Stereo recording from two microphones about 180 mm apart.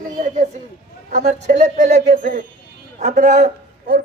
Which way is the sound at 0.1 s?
45° right (ahead or behind).